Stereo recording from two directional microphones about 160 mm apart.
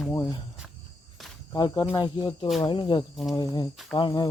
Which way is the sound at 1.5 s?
25° left (ahead or behind).